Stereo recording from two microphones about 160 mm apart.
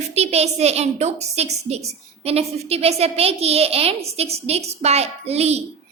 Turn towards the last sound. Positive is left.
turn(degrees=-40)  # may be behind; listen again after turning